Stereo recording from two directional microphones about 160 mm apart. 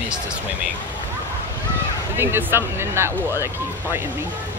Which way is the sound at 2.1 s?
15° right (ahead or behind).